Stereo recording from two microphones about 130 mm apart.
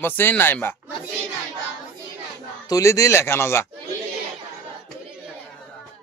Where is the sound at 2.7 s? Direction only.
25° left (ahead or behind).